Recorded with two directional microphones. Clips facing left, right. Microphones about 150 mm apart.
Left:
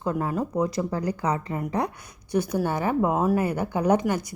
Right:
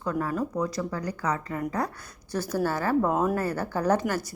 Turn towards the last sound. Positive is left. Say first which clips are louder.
# left 3 dB
turn(degrees=15)  # may be behind; listen again after turning